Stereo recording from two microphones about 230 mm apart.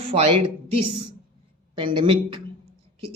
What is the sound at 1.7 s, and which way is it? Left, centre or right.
Speech, right.